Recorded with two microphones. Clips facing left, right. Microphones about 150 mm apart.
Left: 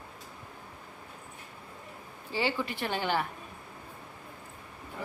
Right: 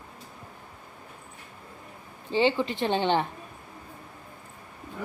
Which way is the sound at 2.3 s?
25° right (ahead or behind).